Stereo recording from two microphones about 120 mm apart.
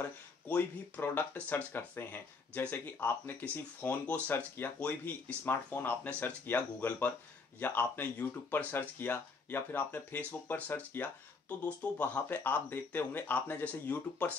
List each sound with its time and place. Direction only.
0.0 s speech: 15° left (ahead or behind)